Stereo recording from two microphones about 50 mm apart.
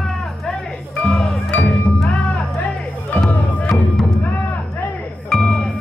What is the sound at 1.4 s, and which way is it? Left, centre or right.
Music, left.